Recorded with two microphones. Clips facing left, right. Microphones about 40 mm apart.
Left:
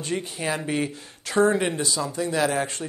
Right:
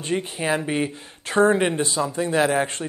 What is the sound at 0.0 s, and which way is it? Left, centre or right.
Speech, right.